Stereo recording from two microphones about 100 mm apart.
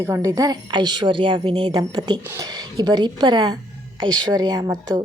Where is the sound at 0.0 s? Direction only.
30° right (ahead or behind).